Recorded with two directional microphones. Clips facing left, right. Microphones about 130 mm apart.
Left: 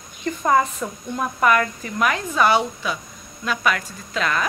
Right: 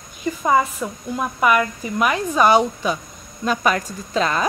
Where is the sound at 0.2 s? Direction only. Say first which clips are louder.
Right 1 dB; 5° right (ahead or behind).